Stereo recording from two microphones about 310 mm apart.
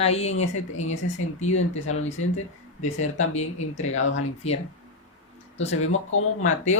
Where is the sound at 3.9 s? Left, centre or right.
Left.